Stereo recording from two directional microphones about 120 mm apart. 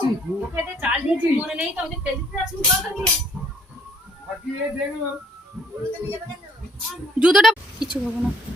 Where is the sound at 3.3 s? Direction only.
10° right (ahead or behind).